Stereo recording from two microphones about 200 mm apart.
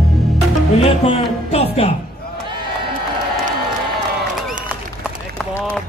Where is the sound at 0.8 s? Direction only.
30° left (ahead or behind).